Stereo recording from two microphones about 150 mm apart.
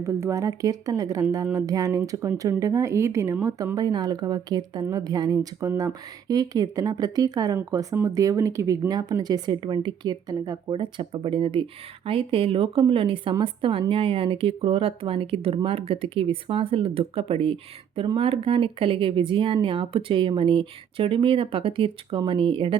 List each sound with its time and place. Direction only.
0.0 s a woman's voice: 20° right (ahead or behind)